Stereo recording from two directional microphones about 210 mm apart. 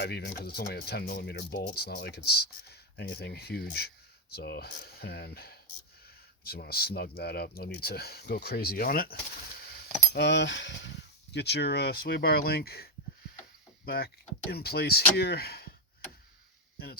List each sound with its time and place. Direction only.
0.0 s speech: 50° left (ahead or behind)
10.2 s speech: 55° left (ahead or behind)
16.7 s speech: 45° left (ahead or behind)